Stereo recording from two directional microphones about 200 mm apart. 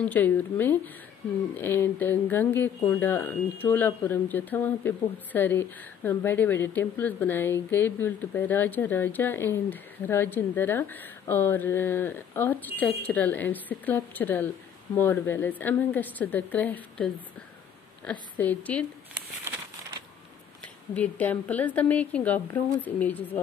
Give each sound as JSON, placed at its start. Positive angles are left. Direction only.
{"t": 0.0, "sound": "speech", "side_deg": 10}
{"t": 18.4, "sound": "speech", "side_deg": 10}
{"t": 20.6, "sound": "speech", "side_deg": 5}